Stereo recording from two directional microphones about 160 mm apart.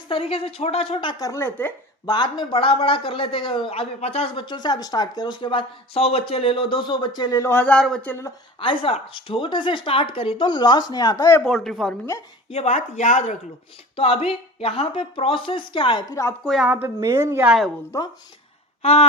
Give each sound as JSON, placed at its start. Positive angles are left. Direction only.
{"t": 0.1, "sound": "a man's voice", "side_deg": 35}
{"t": 1.2, "sound": "speech", "side_deg": 15}
{"t": 2.0, "sound": "a man's voice", "side_deg": 25}
{"t": 8.6, "sound": "a man's voice", "side_deg": 35}
{"t": 11.4, "sound": "speech", "side_deg": 0}
{"t": 12.5, "sound": "a man's voice", "side_deg": 40}
{"t": 16.4, "sound": "a woman's voice", "side_deg": 0}
{"t": 18.8, "sound": "a sound", "side_deg": 40}